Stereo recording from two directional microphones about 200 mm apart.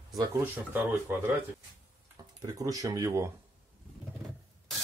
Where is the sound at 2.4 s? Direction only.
15° right (ahead or behind).